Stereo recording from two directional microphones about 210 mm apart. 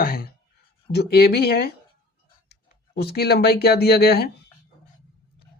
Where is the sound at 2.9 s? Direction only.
50° left (ahead or behind).